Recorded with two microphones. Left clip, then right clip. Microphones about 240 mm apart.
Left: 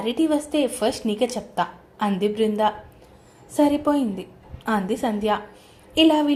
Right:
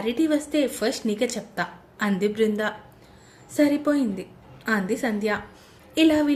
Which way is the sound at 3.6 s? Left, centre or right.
Centre.